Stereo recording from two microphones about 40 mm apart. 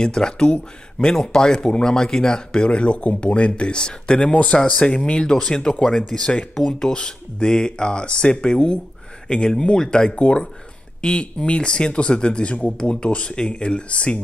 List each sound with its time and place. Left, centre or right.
0.0 s speech: centre
4.3 s speech: left
4.6 s speech: centre
4.9 s speech: left